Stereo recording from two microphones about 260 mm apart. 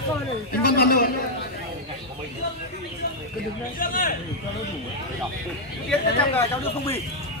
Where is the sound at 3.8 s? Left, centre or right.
Left.